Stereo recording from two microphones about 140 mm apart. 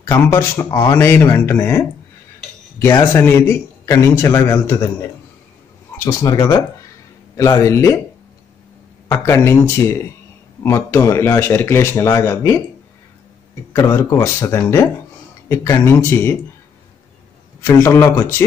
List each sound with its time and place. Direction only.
0.1 s speech: 20° left (ahead or behind)
3.1 s a man's voice: 15° left (ahead or behind)
5.9 s a man's voice: 25° left (ahead or behind)
9.1 s a man's voice: 20° left (ahead or behind)
13.7 s a man's voice: 20° left (ahead or behind)
17.6 s speech: 20° left (ahead or behind)